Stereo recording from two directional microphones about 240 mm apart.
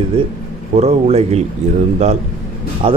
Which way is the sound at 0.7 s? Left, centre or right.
Right.